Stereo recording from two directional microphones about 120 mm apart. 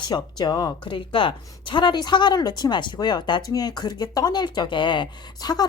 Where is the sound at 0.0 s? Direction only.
35° left (ahead or behind).